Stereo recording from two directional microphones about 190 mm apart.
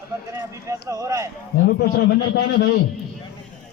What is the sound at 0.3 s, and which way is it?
Speech, 15° right (ahead or behind).